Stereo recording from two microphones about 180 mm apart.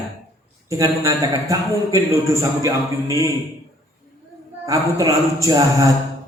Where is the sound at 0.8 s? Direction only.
20° right (ahead or behind).